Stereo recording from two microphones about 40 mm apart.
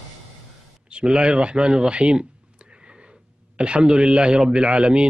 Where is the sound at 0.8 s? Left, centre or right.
Right.